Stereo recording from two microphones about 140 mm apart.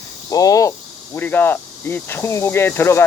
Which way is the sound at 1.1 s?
15° left (ahead or behind).